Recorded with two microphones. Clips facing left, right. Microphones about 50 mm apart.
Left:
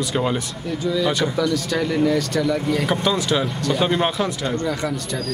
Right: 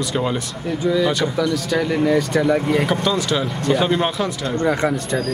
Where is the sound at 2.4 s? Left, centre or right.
Right.